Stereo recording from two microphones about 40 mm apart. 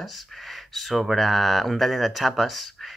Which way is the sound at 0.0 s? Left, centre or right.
Centre.